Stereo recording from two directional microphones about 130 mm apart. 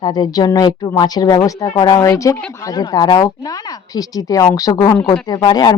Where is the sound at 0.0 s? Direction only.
35° left (ahead or behind).